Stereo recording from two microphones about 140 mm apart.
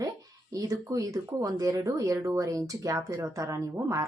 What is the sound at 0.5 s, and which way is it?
Speech, 25° right (ahead or behind).